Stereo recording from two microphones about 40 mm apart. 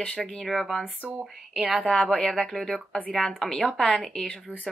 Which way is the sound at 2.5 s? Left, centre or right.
Centre.